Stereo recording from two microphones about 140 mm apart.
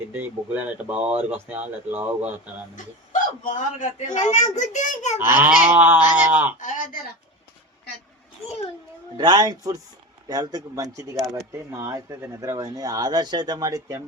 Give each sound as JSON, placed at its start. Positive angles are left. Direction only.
{"t": 0.1, "sound": "speech", "side_deg": -15}
{"t": 2.7, "sound": "speech", "side_deg": 65}
{"t": 5.7, "sound": "speech", "side_deg": -15}
{"t": 6.6, "sound": "speech", "side_deg": 70}
{"t": 9.1, "sound": "speech", "side_deg": -30}